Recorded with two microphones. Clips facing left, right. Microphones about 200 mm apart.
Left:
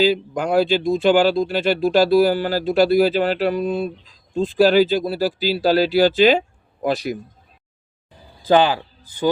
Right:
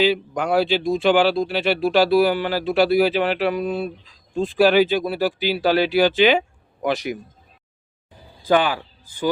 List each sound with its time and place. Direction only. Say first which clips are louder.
0.0 s speech: left 1 dB; 45° left (ahead or behind)
8.4 s a man's voice: left 3 dB; 25° left (ahead or behind)